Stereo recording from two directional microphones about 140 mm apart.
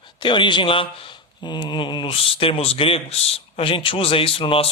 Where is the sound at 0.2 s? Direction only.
35° left (ahead or behind).